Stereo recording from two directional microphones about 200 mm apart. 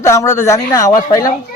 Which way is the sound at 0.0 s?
15° left (ahead or behind).